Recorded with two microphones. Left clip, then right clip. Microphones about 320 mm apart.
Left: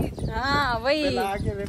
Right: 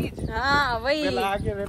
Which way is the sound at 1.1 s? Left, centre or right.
Right.